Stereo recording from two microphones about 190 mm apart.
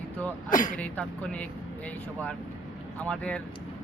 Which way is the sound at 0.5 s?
45° left (ahead or behind).